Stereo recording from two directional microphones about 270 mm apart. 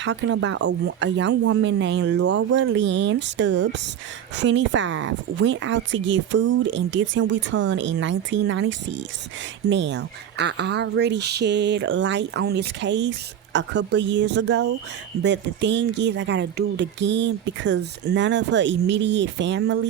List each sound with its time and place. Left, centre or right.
0.0 s speech: right